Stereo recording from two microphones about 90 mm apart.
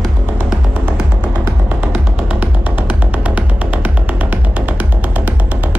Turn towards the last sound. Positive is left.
turn(degrees=-15)  # may be behind; listen again after turning